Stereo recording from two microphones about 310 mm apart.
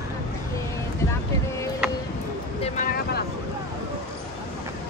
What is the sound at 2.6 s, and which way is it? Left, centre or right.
Vehicle, left.